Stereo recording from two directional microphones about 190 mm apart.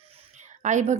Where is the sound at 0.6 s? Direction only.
40° right (ahead or behind).